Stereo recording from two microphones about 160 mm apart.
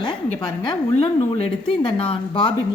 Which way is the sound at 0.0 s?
30° left (ahead or behind).